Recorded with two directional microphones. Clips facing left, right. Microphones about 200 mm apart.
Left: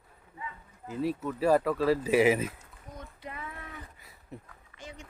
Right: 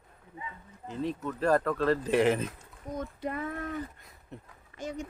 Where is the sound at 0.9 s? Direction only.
5° left (ahead or behind).